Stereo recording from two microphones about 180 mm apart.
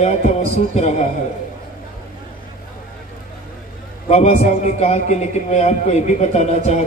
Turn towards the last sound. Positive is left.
turn(degrees=40)  # may be behind; listen again after turning